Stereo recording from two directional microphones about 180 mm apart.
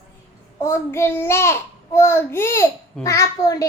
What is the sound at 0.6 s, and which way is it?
A child's voice, 15° left (ahead or behind).